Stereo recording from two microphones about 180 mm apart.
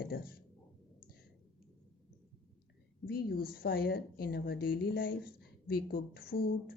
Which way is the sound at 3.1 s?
55° left (ahead or behind).